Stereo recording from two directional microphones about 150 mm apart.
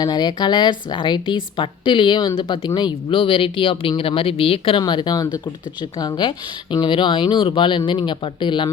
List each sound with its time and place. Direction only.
0.0 s a woman's voice: 30° left (ahead or behind)